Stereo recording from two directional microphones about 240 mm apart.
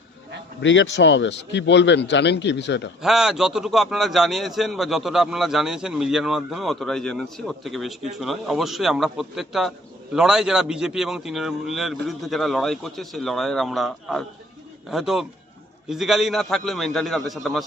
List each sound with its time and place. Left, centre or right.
0.6 s speech: left
3.0 s a man's voice: centre